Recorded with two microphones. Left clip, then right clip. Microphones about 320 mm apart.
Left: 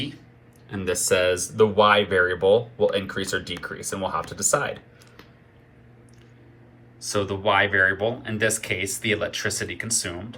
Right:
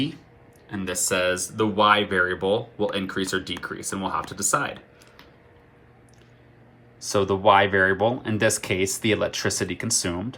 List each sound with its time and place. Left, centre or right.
0.7 s speech: centre
7.0 s speech: centre